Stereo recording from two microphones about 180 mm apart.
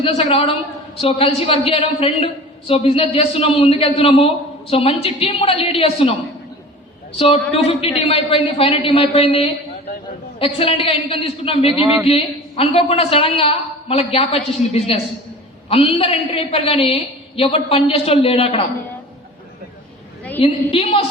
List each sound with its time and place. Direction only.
0.0 s a woman's voice: 35° left (ahead or behind)
7.2 s a woman's voice: 30° left (ahead or behind)
20.4 s a woman's voice: 30° left (ahead or behind)